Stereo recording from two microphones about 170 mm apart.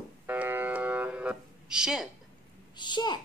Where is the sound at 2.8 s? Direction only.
25° left (ahead or behind).